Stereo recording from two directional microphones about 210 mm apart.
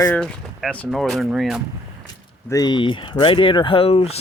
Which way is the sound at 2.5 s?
20° left (ahead or behind).